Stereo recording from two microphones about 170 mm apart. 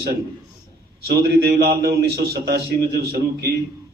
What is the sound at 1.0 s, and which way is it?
A man's voice, 65° right (ahead or behind).